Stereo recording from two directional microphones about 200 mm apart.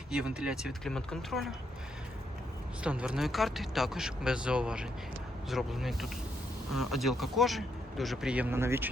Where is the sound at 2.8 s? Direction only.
5° right (ahead or behind).